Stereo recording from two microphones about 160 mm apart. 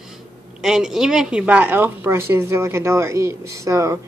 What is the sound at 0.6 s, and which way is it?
A woman's voice, 5° right (ahead or behind).